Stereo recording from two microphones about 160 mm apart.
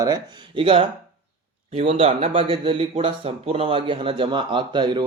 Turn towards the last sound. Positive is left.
turn(degrees=-30)  # may be behind; listen again after turning